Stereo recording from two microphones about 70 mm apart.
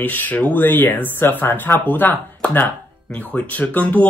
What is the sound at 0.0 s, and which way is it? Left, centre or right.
Speech, left.